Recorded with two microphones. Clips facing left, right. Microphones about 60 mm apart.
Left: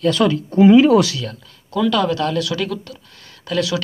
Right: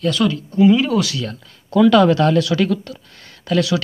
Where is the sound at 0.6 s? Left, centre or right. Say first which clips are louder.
Left 4 dB; left.